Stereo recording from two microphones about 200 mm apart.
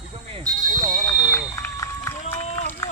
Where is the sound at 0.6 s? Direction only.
40° right (ahead or behind).